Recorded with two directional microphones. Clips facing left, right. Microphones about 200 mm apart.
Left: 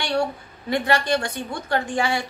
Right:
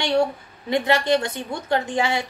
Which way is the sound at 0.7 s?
20° right (ahead or behind).